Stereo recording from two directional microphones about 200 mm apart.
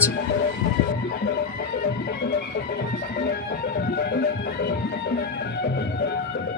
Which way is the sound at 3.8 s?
55° left (ahead or behind).